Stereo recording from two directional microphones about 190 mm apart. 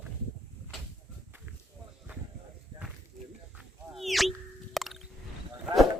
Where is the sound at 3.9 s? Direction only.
Centre (ahead or behind).